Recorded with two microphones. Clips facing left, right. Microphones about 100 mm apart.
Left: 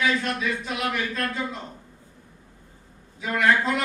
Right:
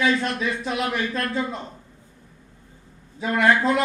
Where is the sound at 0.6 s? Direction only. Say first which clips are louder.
Right 3 dB; 30° right (ahead or behind).